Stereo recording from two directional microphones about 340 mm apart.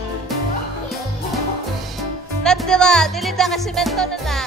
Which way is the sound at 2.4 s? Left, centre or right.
Centre.